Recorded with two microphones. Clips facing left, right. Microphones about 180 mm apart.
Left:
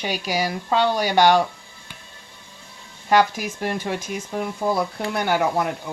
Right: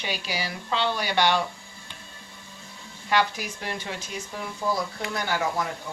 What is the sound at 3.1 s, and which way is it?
Speech, 45° left (ahead or behind).